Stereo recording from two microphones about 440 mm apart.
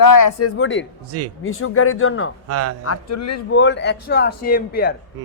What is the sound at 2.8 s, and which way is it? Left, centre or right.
A man's voice, left.